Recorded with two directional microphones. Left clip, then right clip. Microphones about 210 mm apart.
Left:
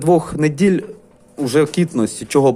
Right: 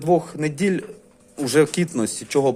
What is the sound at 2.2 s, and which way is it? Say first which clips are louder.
Speech: left 6 dB; 10° left (ahead or behind).